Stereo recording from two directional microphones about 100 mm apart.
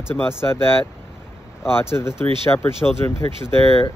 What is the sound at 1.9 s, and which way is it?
Speech, 25° left (ahead or behind).